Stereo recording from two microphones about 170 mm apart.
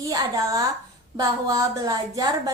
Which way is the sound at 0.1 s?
20° right (ahead or behind).